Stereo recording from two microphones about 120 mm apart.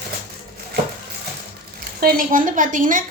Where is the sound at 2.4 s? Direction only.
90° right.